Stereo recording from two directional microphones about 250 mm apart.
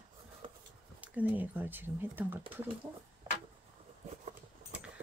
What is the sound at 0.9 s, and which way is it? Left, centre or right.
Speech, centre.